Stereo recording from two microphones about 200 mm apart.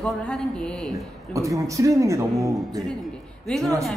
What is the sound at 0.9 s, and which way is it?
Speech, 15° right (ahead or behind).